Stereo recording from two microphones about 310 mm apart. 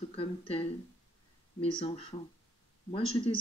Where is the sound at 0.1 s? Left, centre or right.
Centre.